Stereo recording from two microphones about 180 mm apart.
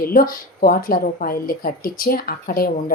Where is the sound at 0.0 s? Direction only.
50° left (ahead or behind).